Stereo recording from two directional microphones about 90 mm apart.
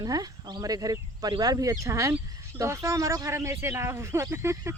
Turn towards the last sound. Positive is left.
turn(degrees=-30)  # may be behind; listen again after turning